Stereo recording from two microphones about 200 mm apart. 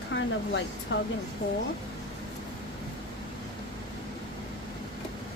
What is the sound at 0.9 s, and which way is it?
Speech, 70° left (ahead or behind).